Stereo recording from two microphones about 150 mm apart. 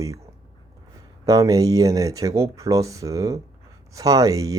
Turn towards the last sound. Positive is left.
turn(degrees=-25)  # may be behind; listen again after turning